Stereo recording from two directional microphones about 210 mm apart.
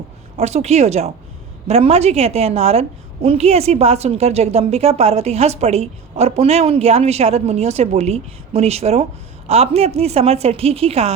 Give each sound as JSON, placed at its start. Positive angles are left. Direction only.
{"t": 0.3, "sound": "a woman's voice", "side_deg": -30}